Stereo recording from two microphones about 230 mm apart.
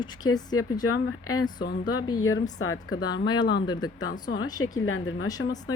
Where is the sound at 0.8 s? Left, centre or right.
Left.